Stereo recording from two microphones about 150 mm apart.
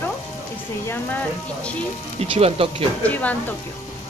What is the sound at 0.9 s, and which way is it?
Speech, 10° left (ahead or behind).